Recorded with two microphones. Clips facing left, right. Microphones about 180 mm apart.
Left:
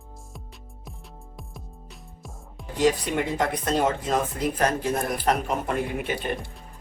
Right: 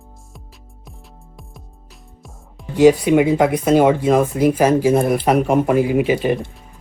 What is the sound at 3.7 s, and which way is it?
Speech, 80° right.